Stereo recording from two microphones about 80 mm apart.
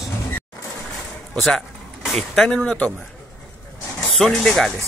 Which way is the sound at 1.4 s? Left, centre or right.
Centre.